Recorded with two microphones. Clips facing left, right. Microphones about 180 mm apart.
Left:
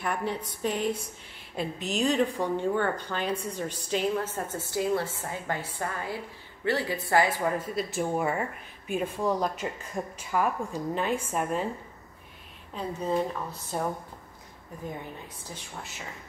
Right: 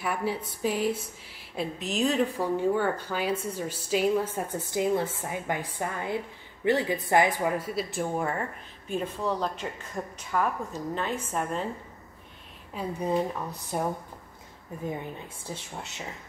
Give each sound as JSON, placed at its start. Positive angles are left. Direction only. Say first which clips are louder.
{"t": 0.0, "sound": "a woman's voice", "louder": "right 1 dB", "side_deg": -5}
{"t": 12.7, "sound": "a woman's voice", "louder": "right 1 dB", "side_deg": -15}
{"t": 15.4, "sound": "speech", "louder": "right 5 dB", "side_deg": -25}